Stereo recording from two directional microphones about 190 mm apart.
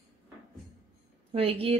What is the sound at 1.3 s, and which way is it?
Speech, 30° right (ahead or behind).